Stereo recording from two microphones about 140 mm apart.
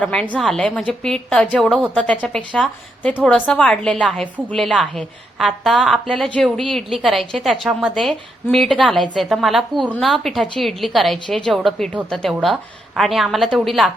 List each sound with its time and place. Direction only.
0.0 s a woman's voice: 10° left (ahead or behind)